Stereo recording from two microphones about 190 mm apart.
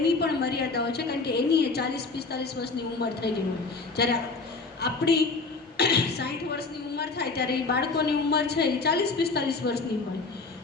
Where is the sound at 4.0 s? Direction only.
60° left (ahead or behind).